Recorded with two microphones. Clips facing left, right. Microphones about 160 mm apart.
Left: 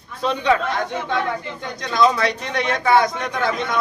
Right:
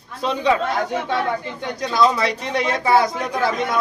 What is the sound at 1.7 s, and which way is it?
A man's voice, 5° right (ahead or behind).